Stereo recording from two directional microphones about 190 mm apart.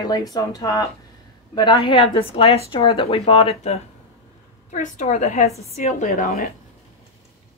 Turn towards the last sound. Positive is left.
turn(degrees=45)  # may be behind; listen again after turning